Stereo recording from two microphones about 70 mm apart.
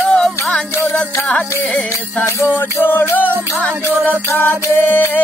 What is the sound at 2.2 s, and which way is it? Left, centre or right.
Music, left.